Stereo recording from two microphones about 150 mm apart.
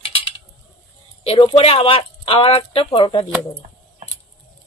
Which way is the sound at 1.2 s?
35° left (ahead or behind).